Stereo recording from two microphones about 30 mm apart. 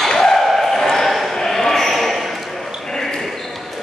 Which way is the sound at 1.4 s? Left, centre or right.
Centre.